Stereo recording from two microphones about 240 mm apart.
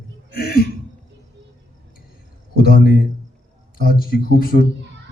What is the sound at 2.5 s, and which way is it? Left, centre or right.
A man's voice, left.